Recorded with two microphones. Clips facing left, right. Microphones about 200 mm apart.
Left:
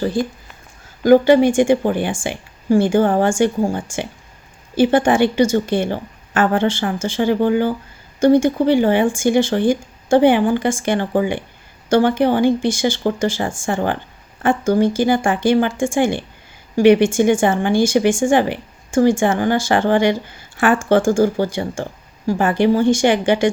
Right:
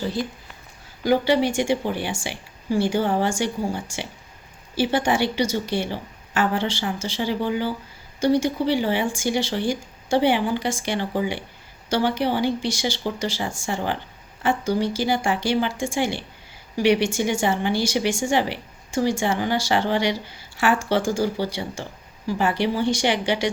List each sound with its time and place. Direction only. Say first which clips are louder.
0.0 s speech: left 7 dB; 50° left (ahead or behind)